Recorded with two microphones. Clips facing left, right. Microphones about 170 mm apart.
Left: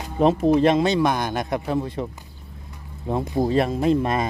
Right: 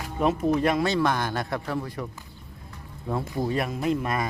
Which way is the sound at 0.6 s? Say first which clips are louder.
Left 5 dB; 25° left (ahead or behind).